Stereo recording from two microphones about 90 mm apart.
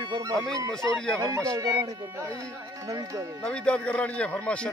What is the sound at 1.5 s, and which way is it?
Speech, 40° right (ahead or behind).